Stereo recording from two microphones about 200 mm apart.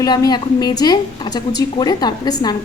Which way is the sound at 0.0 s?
20° left (ahead or behind).